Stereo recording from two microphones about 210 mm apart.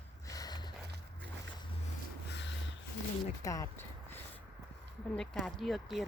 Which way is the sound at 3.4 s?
15° left (ahead or behind).